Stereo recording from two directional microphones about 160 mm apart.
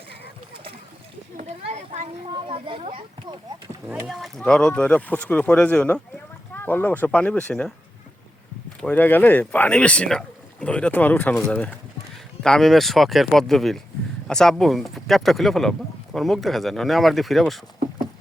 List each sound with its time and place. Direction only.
1.4 s a sound: 45° right (ahead or behind)
2.3 s a child's voice: 30° right (ahead or behind)
3.8 s speech: 5° right (ahead or behind)
8.8 s speech: 10° left (ahead or behind)